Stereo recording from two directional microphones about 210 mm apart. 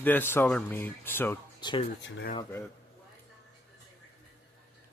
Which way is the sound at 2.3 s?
15° left (ahead or behind).